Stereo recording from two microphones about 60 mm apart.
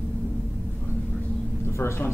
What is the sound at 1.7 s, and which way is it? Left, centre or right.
Speech, left.